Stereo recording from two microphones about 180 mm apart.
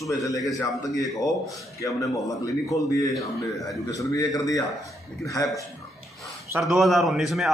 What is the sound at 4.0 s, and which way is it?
Speech, 20° left (ahead or behind).